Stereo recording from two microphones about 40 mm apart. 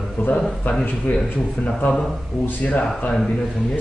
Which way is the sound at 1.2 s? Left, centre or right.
Left.